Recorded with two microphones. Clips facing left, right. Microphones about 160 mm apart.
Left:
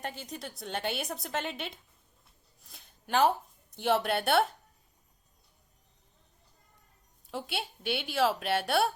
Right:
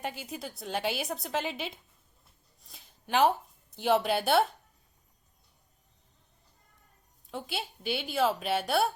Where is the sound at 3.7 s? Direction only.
Centre (ahead or behind).